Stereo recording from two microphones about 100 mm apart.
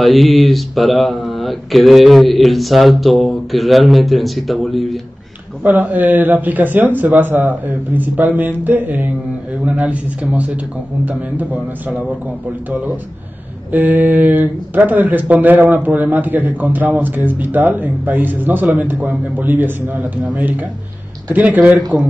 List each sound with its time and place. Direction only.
0.0 s speech: centre (ahead or behind)
5.6 s speech: 15° right (ahead or behind)
13.7 s speech: 15° right (ahead or behind)
21.3 s speech: 15° right (ahead or behind)